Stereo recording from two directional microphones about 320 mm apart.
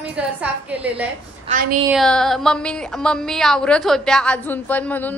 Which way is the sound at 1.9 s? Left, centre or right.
Centre.